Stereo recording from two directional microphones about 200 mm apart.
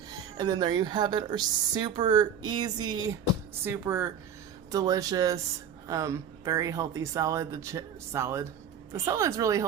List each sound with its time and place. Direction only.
0.3 s speech: 20° right (ahead or behind)